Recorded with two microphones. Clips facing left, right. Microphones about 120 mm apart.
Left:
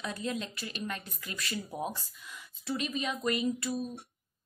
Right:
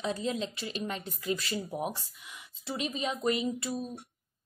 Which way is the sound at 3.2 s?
25° right (ahead or behind).